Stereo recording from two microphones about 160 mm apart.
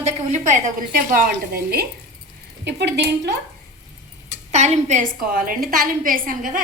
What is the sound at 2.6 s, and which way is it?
Speech, 90° right.